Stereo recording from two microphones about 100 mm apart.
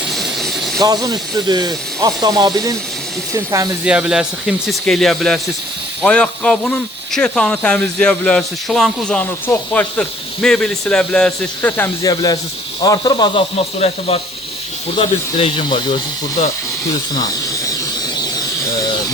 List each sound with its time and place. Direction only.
0.1 s vehicle: centre (ahead or behind)
0.8 s speech: 40° right (ahead or behind)
3.8 s speech: 10° right (ahead or behind); by 9.2 s 5° left (ahead or behind)
9.5 s speech: 15° left (ahead or behind)
12.0 s speech: 40° left (ahead or behind)
13.3 s speech: 90° left
15.5 s speech: 55° left (ahead or behind)
16.4 s speech: 90° left
17.2 s a sound: 35° left (ahead or behind)